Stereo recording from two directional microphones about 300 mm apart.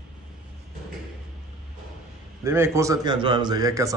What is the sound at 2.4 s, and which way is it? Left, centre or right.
A man's voice, centre.